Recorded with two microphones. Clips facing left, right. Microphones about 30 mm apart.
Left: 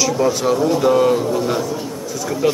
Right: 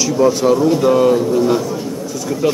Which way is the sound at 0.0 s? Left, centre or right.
Centre.